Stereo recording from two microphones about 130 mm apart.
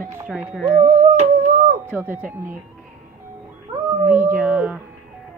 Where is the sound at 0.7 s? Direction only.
55° right (ahead or behind); by 1.8 s 80° right.